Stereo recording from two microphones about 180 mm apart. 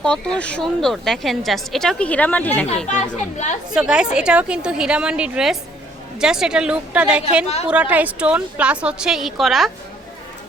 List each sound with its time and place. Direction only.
0.0 s a woman's voice: 5° left (ahead or behind)
2.8 s speech: 40° left (ahead or behind)
3.8 s a woman's voice: 5° right (ahead or behind)